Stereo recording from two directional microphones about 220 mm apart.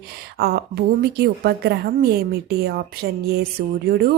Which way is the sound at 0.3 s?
45° right (ahead or behind).